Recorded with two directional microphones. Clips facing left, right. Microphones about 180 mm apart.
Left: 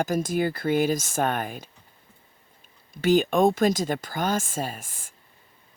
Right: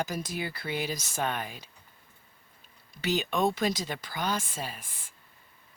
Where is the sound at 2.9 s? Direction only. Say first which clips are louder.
Left 9 dB; 50° left (ahead or behind).